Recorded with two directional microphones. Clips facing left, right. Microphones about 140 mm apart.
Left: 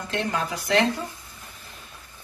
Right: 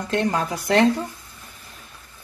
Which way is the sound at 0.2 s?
40° right (ahead or behind).